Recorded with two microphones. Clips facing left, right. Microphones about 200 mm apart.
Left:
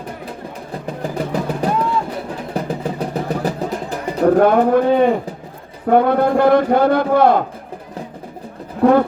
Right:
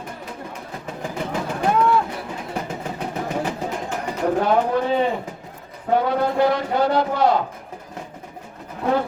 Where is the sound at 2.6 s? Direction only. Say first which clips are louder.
Left 7 dB; 35° left (ahead or behind).